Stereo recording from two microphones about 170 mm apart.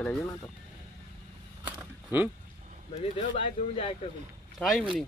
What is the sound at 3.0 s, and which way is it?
Speech, 35° left (ahead or behind).